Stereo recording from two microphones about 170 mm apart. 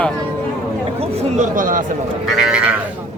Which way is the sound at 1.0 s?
45° right (ahead or behind).